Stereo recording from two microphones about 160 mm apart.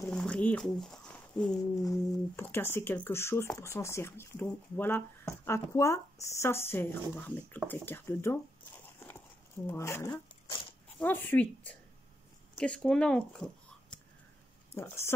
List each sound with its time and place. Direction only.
0.1 s a sound: 5° left (ahead or behind)
1.6 s speech: 20° left (ahead or behind); by 13.9 s 5° left (ahead or behind)
14.7 s speech: 15° left (ahead or behind)